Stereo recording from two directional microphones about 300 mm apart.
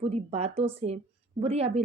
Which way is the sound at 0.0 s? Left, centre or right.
Right.